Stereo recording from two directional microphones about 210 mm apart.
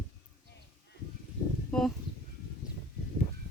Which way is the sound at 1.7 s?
Centre (ahead or behind).